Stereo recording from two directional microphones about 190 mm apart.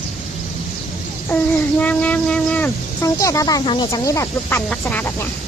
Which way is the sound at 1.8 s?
10° left (ahead or behind).